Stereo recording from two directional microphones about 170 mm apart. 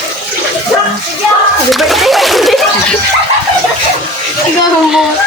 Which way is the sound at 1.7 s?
Centre (ahead or behind).